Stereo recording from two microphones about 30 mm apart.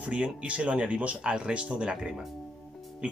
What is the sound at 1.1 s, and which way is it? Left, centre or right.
Speech, right.